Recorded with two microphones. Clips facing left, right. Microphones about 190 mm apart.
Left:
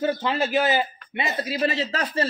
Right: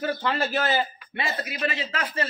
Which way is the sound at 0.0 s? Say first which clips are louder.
Left 3 dB; 20° left (ahead or behind).